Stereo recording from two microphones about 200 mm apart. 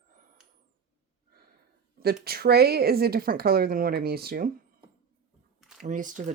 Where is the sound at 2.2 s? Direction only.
50° right (ahead or behind).